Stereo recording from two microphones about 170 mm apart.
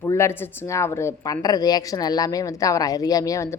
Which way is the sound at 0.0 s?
15° left (ahead or behind).